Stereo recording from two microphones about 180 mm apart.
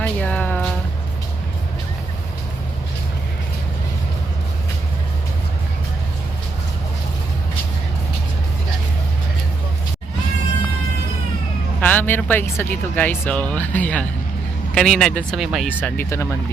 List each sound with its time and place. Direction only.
0.0 s speech: 10° left (ahead or behind)
11.8 s speech: 10° left (ahead or behind)
15.8 s speech: 15° left (ahead or behind)